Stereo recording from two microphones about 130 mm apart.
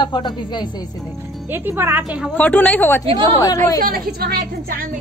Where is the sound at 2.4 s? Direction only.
15° left (ahead or behind).